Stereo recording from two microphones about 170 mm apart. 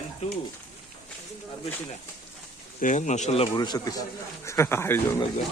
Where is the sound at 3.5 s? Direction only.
25° left (ahead or behind).